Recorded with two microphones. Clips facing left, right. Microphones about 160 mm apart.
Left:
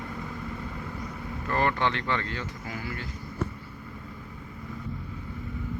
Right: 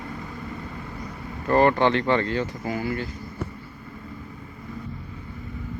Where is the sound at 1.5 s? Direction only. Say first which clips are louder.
Right 8 dB; 40° right (ahead or behind).